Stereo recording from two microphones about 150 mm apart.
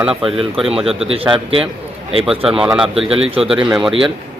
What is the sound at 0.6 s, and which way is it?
Speech, 5° right (ahead or behind).